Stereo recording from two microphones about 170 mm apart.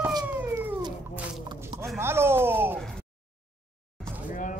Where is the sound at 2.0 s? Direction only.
15° right (ahead or behind).